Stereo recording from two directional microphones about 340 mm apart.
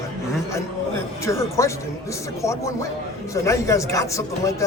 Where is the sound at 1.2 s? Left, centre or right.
Centre.